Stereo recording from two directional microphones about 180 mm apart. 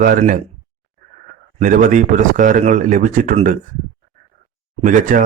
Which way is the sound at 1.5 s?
45° right (ahead or behind).